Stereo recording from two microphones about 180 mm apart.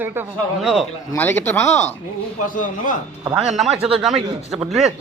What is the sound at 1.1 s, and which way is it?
Speech, 10° left (ahead or behind).